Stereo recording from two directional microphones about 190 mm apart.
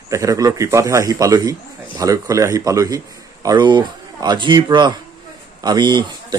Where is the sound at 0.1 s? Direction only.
15° right (ahead or behind).